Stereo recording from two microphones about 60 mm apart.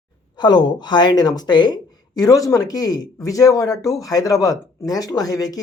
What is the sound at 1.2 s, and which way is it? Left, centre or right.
Speech, left.